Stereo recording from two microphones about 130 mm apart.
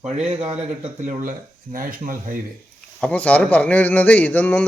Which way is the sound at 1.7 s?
90° right.